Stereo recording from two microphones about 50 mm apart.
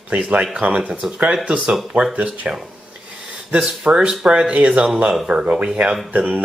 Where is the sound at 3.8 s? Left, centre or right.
Right.